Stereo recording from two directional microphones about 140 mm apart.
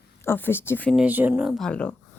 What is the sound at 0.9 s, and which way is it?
Speech, 10° right (ahead or behind).